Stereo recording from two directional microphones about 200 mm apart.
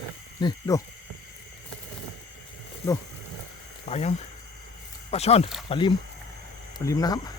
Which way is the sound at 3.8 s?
35° left (ahead or behind).